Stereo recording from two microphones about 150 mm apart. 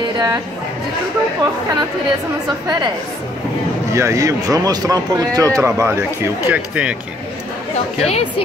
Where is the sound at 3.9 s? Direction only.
20° right (ahead or behind).